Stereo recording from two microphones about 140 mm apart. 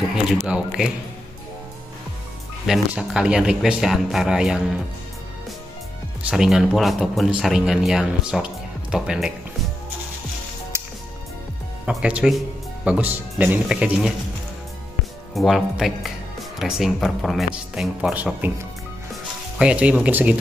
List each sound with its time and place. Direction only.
0.1 s speech: 5° right (ahead or behind)
2.9 s speech: 5° right (ahead or behind)
6.2 s speech: 5° right (ahead or behind)
10.7 s music: 20° right (ahead or behind)
11.8 s speech: 5° right (ahead or behind)
15.3 s speech: centre (ahead or behind)